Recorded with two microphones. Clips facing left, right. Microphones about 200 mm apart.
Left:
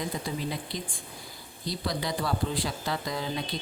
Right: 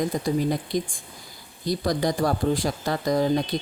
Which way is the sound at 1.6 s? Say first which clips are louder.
Right 8 dB; 45° right (ahead or behind).